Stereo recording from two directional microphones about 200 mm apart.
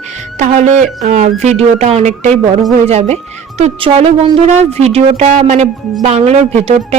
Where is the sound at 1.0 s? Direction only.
35° right (ahead or behind).